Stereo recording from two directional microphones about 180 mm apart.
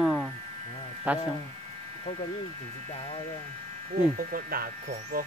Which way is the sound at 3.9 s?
50° right (ahead or behind).